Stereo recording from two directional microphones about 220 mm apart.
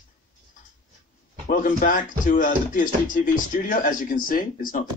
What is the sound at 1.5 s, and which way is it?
Music, 40° left (ahead or behind).